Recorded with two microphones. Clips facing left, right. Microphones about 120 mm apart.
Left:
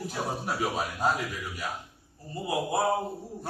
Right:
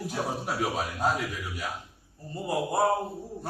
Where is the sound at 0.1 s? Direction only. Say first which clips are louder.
Right 2 dB; centre (ahead or behind).